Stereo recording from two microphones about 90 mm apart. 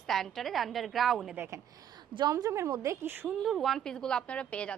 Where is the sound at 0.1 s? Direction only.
5° left (ahead or behind).